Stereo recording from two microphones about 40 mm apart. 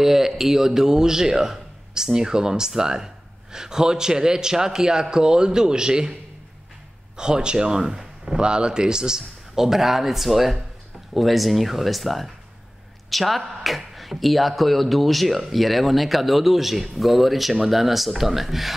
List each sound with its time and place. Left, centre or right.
0.0 s speech: centre
7.2 s speech: centre
8.4 s speech: right; by 18.8 s centre